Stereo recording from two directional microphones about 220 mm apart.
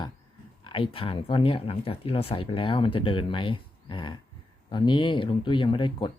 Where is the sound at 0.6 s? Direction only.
25° left (ahead or behind).